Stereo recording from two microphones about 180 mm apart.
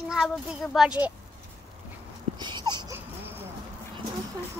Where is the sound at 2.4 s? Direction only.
25° right (ahead or behind).